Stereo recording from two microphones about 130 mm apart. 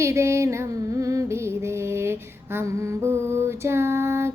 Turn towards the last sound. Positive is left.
turn(degrees=-20)  # may be behind; listen again after turning